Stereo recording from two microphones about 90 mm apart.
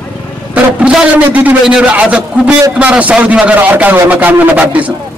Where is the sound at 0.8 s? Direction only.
15° right (ahead or behind).